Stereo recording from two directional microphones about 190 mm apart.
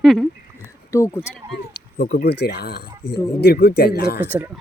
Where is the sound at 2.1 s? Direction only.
55° left (ahead or behind).